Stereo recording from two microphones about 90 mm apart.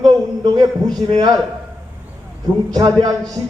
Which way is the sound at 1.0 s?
45° right (ahead or behind).